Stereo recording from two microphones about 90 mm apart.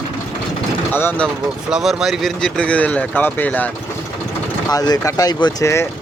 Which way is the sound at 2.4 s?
10° left (ahead or behind).